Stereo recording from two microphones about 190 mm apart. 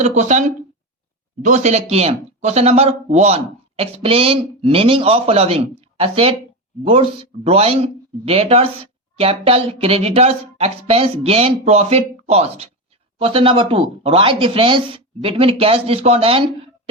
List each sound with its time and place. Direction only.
0.0 s speech: 35° right (ahead or behind)